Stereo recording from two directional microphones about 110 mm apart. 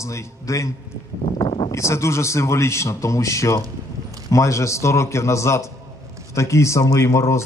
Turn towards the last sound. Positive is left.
turn(degrees=25)  # may be behind; listen again after turning